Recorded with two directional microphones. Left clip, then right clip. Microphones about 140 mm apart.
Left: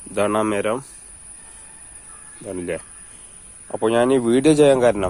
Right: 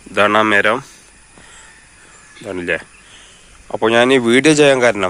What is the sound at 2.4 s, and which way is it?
Speech, 5° right (ahead or behind).